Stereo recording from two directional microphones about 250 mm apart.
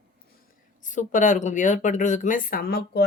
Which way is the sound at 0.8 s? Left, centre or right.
Left.